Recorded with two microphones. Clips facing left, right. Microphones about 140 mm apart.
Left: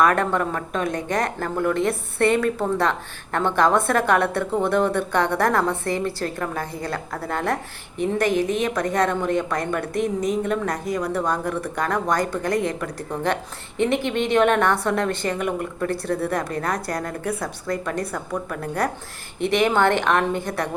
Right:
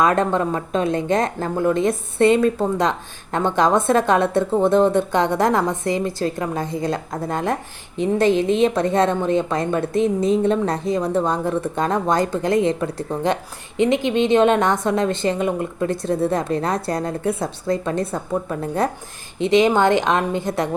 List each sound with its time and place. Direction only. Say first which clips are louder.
0.0 s a woman's voice: right 2 dB; 20° right (ahead or behind)